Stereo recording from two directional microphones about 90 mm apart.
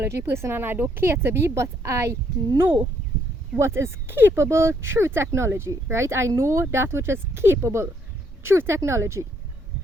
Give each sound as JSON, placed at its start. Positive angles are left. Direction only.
{"t": 0.0, "sound": "speech", "side_deg": -25}
{"t": 3.6, "sound": "speech", "side_deg": -30}